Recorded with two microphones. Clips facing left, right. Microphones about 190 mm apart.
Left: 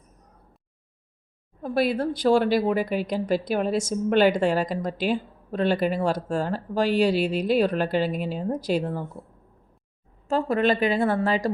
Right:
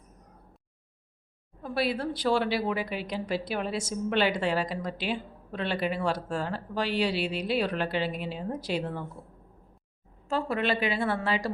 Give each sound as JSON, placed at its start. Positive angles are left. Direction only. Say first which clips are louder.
{"t": 1.6, "sound": "a woman's voice", "louder": "left 6 dB", "side_deg": 45}
{"t": 10.2, "sound": "a woman's voice", "louder": "left 6 dB", "side_deg": 45}